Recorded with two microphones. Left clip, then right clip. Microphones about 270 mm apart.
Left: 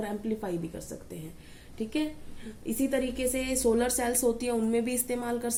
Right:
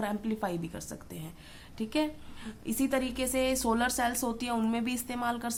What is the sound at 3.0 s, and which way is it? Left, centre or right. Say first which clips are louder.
Speech: left 3 dB; right.